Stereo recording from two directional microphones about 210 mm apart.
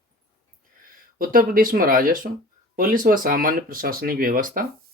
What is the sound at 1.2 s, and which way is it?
Speech, 40° right (ahead or behind).